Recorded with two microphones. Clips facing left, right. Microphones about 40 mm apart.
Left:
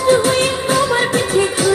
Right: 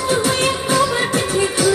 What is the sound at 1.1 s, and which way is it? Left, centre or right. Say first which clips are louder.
Music: left 2 dB; left.